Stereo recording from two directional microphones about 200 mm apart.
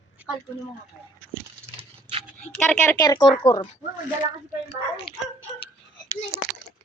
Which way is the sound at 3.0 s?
20° left (ahead or behind).